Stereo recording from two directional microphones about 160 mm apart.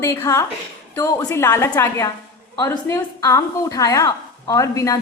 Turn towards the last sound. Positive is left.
turn(degrees=20)  # may be behind; listen again after turning